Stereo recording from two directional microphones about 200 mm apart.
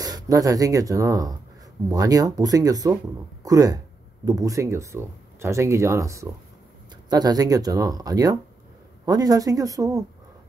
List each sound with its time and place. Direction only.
0.0 s speech: 20° right (ahead or behind)